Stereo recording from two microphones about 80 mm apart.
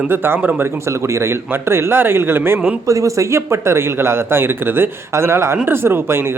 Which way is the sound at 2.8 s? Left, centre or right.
Right.